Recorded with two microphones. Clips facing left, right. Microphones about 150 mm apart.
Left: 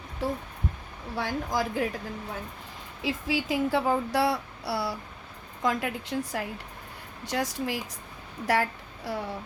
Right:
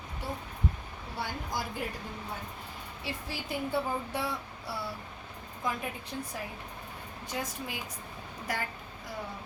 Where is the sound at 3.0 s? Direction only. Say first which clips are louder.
Left 10 dB; 90° left.